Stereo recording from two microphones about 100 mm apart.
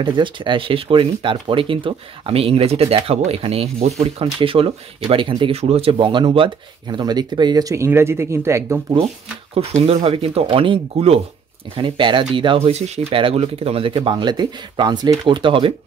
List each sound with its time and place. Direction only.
0.0 s speech: 55° right (ahead or behind)
5.5 s speech: 85° right; by 8.7 s 30° right (ahead or behind)
8.9 s speech: 90° right
11.7 s speech: 55° right (ahead or behind)
12.5 s speech: 90° right; by 15.7 s 60° right (ahead or behind)